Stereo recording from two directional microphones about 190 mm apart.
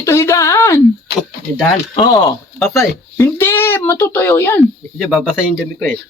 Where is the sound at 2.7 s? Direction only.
10° left (ahead or behind).